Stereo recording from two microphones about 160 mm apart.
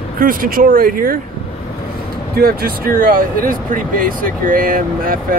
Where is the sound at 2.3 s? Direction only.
70° right (ahead or behind).